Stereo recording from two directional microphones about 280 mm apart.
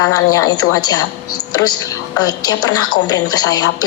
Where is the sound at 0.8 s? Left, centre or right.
Centre.